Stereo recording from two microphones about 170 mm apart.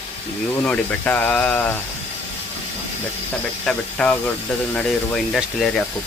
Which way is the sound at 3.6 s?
5° left (ahead or behind).